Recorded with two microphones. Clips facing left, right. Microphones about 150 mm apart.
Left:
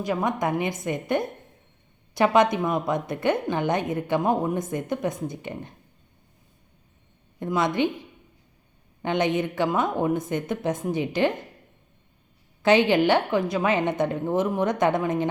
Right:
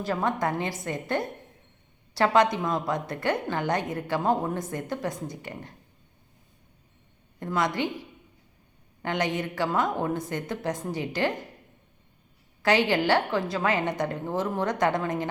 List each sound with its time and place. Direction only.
0.0 s a woman's voice: 15° left (ahead or behind)
7.3 s a woman's voice: 20° left (ahead or behind)
9.0 s a woman's voice: 20° left (ahead or behind)
12.6 s a woman's voice: 20° left (ahead or behind)